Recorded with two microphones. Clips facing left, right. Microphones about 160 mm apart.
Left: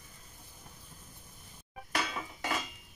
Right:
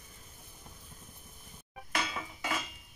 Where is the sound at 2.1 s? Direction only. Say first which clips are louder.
Left 1 dB; 40° left (ahead or behind).